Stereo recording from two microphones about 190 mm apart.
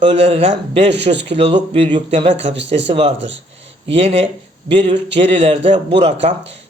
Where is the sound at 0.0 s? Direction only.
30° right (ahead or behind).